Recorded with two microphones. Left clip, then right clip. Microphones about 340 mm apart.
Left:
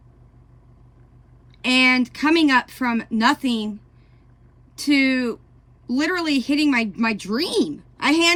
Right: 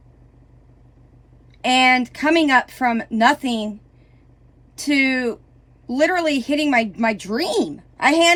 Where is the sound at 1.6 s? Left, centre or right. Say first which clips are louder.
Right 2 dB; centre.